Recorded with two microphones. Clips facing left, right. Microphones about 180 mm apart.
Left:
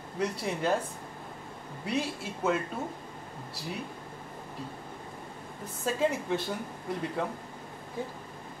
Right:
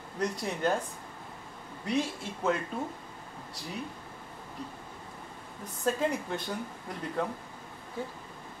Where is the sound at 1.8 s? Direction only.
5° left (ahead or behind).